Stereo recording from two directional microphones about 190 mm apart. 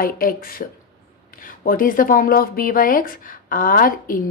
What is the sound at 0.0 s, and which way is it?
Speech, 50° left (ahead or behind).